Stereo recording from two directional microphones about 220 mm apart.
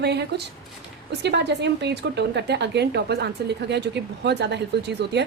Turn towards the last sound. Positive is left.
turn(degrees=-50)  # may be behind; listen again after turning